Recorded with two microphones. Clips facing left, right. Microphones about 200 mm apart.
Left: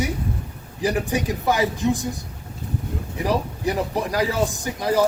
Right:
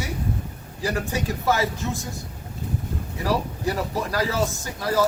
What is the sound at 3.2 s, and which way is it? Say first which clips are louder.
A man's voice: left 2 dB; 20° left (ahead or behind).